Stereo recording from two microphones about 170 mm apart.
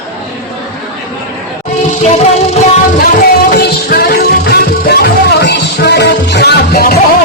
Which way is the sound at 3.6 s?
65° left (ahead or behind).